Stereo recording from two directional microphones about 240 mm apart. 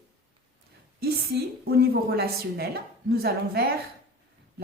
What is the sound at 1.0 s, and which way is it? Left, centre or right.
A woman's voice, right.